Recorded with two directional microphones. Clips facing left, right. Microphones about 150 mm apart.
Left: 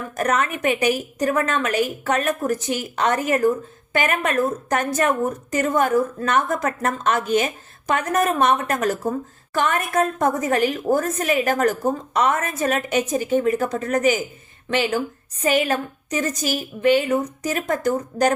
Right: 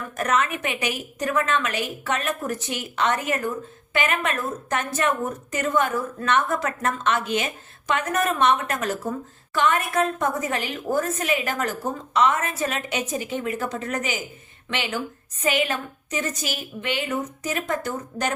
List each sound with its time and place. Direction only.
0.2 s a woman's voice: 40° left (ahead or behind)